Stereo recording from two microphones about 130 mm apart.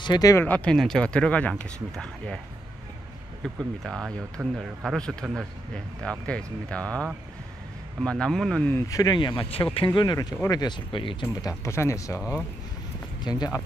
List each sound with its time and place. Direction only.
0.0 s speech: 30° left (ahead or behind)
0.4 s speech: 10° left (ahead or behind)
3.4 s speech: 5° left (ahead or behind)
6.0 s speech: 10° left (ahead or behind)
8.6 s speech: 20° left (ahead or behind); by 9.7 s 40° left (ahead or behind)
9.8 s speech: 30° left (ahead or behind)
11.4 s speech: 20° left (ahead or behind)
13.2 s speech: 30° left (ahead or behind)